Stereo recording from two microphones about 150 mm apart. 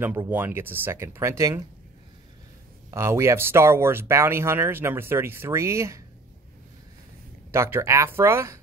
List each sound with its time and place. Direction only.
0.0 s speech: 15° right (ahead or behind)
2.9 s speech: 15° right (ahead or behind)
7.5 s speech: 15° right (ahead or behind)